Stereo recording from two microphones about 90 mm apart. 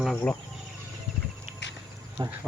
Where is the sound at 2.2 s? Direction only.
50° right (ahead or behind).